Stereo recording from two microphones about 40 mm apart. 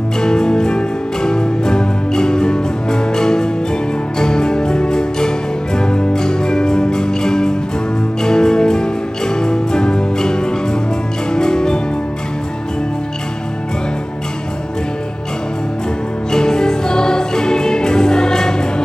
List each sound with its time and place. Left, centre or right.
0.2 s music: centre
16.3 s music: centre